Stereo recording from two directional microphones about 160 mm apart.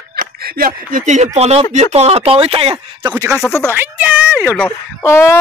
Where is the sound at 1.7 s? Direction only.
40° right (ahead or behind).